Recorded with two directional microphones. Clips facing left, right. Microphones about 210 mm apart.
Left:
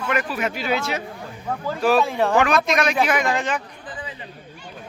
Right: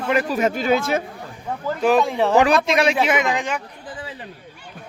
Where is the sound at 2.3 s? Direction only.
30° right (ahead or behind); by 3.6 s 10° right (ahead or behind).